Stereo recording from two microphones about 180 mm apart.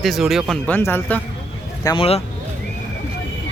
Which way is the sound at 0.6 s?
10° left (ahead or behind).